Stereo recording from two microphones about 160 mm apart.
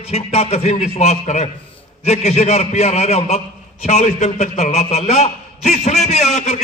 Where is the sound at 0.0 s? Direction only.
40° left (ahead or behind).